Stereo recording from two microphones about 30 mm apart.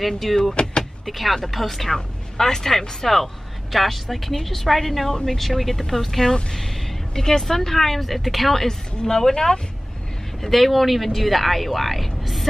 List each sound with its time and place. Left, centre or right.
0.3 s speech: centre
1.9 s speech: centre
3.7 s speech: centre
6.2 s speech: centre
9.0 s speech: centre
10.4 s speech: centre